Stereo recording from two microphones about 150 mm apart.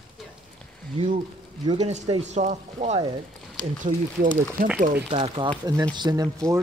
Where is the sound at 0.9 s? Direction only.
40° right (ahead or behind).